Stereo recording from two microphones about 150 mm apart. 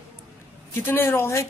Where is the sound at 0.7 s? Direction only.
15° left (ahead or behind).